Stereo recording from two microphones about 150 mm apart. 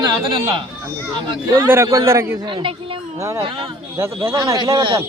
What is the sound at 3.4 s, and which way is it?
Speech, 40° right (ahead or behind).